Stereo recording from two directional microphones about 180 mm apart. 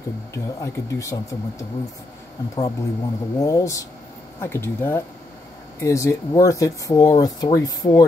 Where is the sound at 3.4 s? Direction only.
15° left (ahead or behind).